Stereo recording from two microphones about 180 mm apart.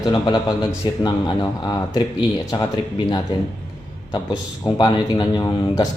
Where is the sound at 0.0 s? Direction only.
25° left (ahead or behind).